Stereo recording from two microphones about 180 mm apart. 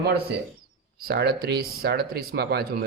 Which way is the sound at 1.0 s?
65° right (ahead or behind).